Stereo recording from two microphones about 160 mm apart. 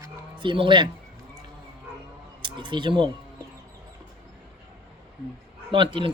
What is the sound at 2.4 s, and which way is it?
Speech, 30° right (ahead or behind).